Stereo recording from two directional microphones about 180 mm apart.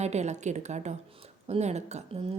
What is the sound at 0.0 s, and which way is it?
A woman's voice, 40° right (ahead or behind).